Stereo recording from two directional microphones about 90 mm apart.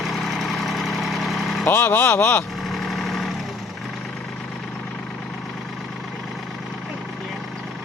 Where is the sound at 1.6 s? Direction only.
25° left (ahead or behind).